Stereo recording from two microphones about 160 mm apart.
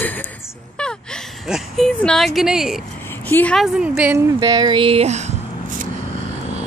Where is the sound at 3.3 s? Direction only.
10° left (ahead or behind).